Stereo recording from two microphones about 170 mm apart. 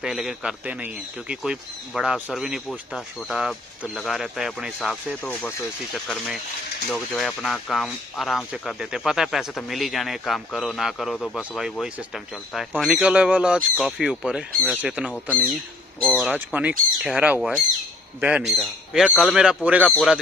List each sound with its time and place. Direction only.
0.0 s speech: 5° right (ahead or behind)
16.0 s speech: 5° left (ahead or behind)
16.3 s speech: 10° right (ahead or behind)